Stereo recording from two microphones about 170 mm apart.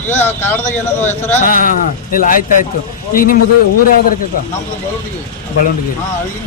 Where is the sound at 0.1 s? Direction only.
10° left (ahead or behind).